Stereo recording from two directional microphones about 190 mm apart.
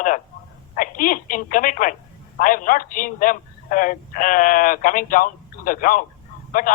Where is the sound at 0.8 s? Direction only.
45° left (ahead or behind).